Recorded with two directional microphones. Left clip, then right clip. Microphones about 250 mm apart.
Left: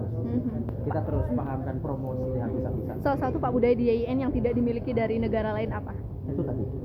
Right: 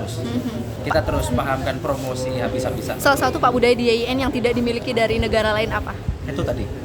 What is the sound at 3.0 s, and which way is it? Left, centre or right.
A woman's voice, centre.